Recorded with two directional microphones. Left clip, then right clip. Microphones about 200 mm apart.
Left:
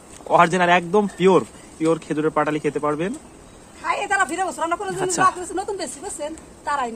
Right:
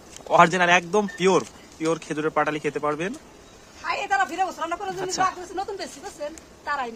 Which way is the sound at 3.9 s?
45° left (ahead or behind).